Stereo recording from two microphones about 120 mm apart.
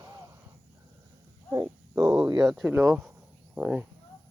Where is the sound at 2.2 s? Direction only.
35° right (ahead or behind).